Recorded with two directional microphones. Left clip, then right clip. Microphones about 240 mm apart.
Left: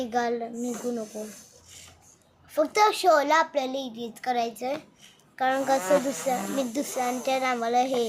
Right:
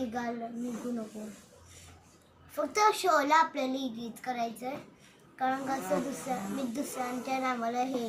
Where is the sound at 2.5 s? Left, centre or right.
Left.